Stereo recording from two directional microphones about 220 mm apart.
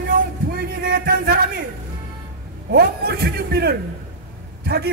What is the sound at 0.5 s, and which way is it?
Music, 40° right (ahead or behind).